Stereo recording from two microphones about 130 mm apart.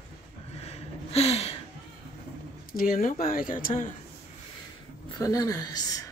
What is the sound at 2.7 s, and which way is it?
Speech, 90° left.